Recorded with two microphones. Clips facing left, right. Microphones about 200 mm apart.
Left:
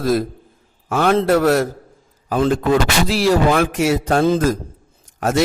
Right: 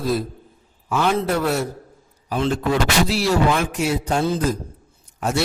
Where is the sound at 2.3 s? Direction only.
50° left (ahead or behind).